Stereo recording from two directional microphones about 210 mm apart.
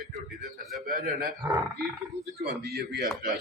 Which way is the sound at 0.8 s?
45° right (ahead or behind).